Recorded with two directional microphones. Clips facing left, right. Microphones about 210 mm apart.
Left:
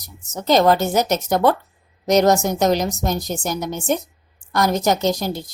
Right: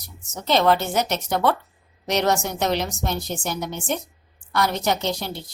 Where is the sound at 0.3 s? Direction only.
40° left (ahead or behind).